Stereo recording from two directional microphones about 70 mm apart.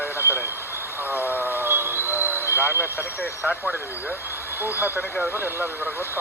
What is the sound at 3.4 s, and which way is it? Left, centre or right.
Speech, centre.